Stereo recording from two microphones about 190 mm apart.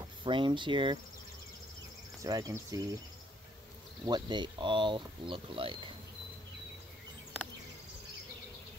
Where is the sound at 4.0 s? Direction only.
25° right (ahead or behind).